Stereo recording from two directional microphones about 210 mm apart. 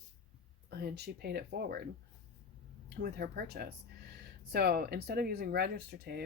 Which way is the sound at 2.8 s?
45° right (ahead or behind).